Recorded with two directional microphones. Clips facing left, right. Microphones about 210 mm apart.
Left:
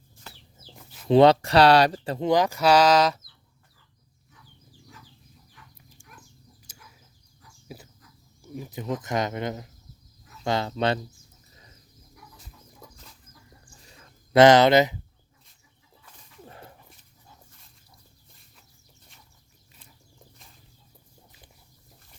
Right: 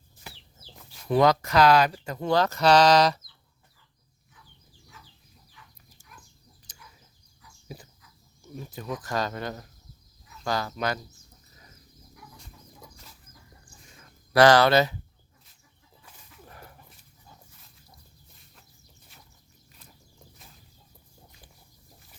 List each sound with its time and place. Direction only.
0.3 s chicken: 15° right (ahead or behind)
1.0 s speech: 25° left (ahead or behind)
2.2 s speech: 15° left (ahead or behind)
5.6 s dog: 45° left (ahead or behind)
6.0 s a sound: 25° left (ahead or behind)
8.5 s speech: 15° left (ahead or behind)
14.3 s speech: 20° left (ahead or behind)
16.5 s dog: 25° left (ahead or behind)